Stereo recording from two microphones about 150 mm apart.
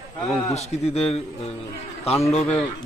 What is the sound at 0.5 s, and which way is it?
A man's voice, 45° left (ahead or behind).